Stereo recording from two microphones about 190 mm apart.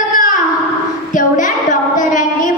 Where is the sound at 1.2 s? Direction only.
40° left (ahead or behind).